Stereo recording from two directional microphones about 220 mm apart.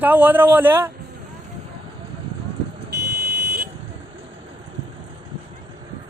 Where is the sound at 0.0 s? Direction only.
10° right (ahead or behind).